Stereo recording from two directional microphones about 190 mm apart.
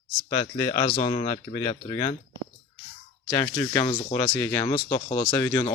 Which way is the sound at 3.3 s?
15° left (ahead or behind).